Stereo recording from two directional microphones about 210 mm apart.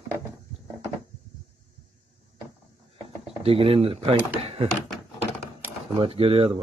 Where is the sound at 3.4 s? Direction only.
25° right (ahead or behind).